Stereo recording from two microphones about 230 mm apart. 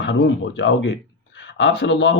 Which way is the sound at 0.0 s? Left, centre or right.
Left.